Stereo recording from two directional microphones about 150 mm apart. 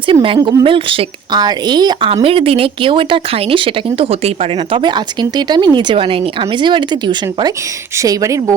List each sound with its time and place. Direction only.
0.1 s speech: 35° right (ahead or behind)
0.3 s a woman's voice: 25° right (ahead or behind)
0.6 s a woman's voice: 35° right (ahead or behind)